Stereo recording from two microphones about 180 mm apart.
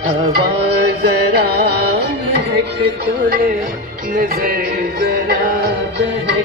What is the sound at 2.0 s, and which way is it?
Music, 65° right (ahead or behind).